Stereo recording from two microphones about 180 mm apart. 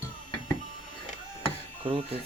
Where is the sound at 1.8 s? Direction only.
30° right (ahead or behind).